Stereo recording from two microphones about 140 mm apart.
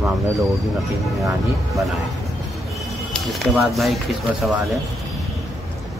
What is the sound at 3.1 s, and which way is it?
Speech, centre (ahead or behind).